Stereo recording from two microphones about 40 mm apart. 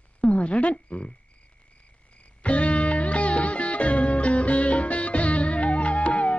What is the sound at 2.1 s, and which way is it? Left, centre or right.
Music, left.